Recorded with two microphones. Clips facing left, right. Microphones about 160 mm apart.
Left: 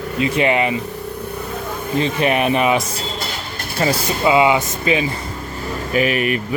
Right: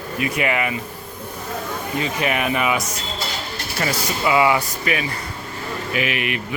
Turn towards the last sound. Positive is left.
turn(degrees=40)  # may be behind; listen again after turning